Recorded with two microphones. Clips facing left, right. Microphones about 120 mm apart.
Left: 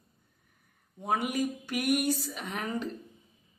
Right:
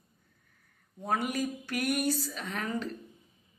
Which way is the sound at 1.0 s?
15° left (ahead or behind).